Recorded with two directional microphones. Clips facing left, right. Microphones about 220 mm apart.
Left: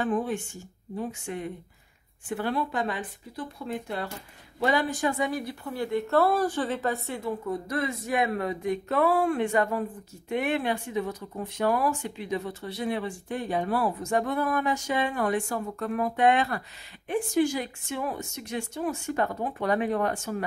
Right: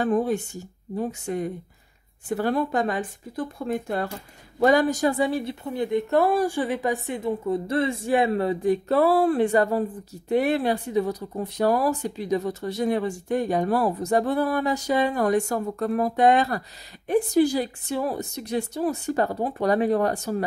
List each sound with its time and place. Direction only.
0.0 s speech: 40° right (ahead or behind)